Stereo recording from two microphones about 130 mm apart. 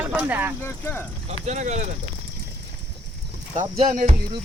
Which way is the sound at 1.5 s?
65° right (ahead or behind).